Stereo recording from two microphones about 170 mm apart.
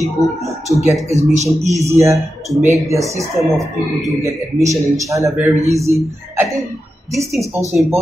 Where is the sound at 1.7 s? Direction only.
20° right (ahead or behind).